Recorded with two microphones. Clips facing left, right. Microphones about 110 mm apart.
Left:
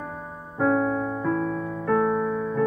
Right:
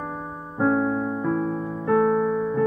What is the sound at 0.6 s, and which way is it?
Music, 20° right (ahead or behind).